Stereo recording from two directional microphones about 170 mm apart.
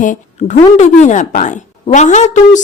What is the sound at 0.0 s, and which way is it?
A woman's voice, 45° left (ahead or behind).